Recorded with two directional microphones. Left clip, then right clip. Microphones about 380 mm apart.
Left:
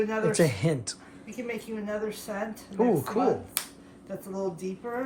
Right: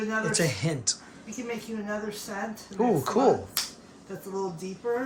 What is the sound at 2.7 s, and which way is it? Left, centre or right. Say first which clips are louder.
Speech: right 1 dB; centre.